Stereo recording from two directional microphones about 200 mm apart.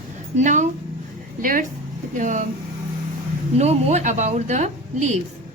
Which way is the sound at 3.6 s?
35° right (ahead or behind).